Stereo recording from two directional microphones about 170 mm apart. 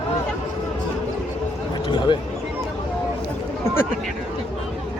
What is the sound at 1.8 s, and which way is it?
Speech, 25° left (ahead or behind).